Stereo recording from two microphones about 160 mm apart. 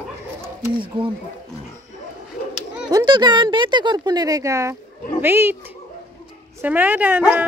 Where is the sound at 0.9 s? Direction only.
30° right (ahead or behind).